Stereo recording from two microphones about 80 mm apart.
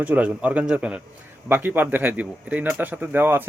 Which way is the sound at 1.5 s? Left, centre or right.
Right.